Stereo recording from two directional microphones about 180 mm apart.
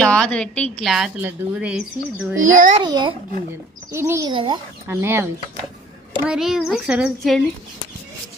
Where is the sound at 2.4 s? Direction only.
45° right (ahead or behind).